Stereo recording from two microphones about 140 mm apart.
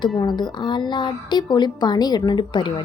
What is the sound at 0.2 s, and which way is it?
A woman's voice, 30° left (ahead or behind).